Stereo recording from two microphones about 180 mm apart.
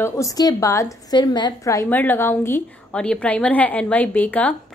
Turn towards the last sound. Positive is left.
turn(degrees=10)  # may be behind; listen again after turning